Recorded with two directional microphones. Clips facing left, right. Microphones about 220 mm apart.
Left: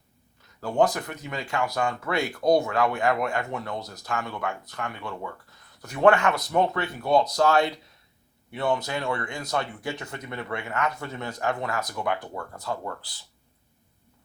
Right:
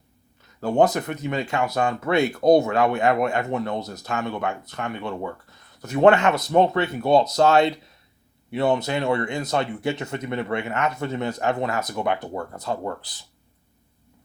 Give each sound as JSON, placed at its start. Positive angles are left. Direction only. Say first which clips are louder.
{"t": 0.6, "sound": "speech", "louder": "right 4 dB", "side_deg": -25}